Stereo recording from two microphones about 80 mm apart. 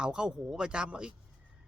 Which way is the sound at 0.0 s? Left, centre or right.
Centre.